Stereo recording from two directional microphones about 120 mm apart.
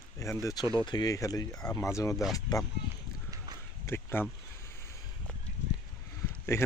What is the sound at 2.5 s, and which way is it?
Speech, 35° left (ahead or behind).